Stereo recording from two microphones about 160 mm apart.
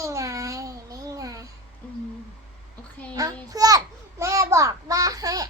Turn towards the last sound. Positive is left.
turn(degrees=-25)  # may be behind; listen again after turning